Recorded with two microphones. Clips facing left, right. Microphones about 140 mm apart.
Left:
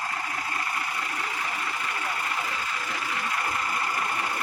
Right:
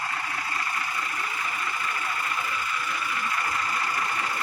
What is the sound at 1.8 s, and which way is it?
Vehicle, 70° left (ahead or behind).